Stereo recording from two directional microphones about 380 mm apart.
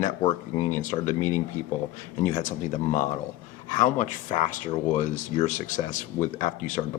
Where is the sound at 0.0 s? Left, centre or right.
Centre.